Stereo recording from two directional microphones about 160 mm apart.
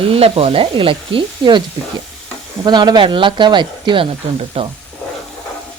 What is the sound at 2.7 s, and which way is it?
Speech, 25° right (ahead or behind).